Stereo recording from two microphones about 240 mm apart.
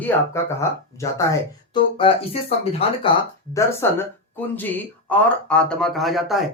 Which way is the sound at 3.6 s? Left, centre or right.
Centre.